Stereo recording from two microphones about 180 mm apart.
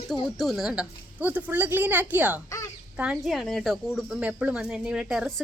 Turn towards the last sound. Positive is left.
turn(degrees=0)  # may be behind; listen again after turning